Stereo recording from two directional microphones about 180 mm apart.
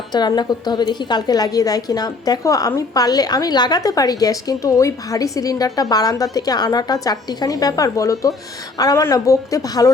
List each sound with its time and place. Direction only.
0.1 s a woman's voice: 25° left (ahead or behind)